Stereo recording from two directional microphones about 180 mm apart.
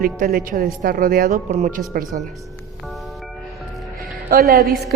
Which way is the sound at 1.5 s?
40° right (ahead or behind).